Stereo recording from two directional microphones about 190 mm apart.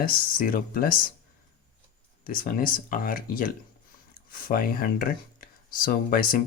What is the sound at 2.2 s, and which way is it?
Speech, 50° left (ahead or behind).